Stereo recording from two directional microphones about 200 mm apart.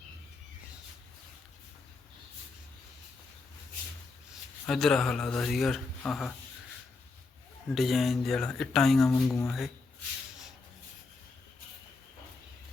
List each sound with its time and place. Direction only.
4.6 s speech: 5° left (ahead or behind)
7.8 s speech: centre (ahead or behind)
9.0 s speech: 15° left (ahead or behind)